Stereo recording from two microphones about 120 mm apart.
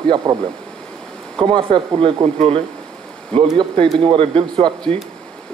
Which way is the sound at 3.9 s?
50° right (ahead or behind).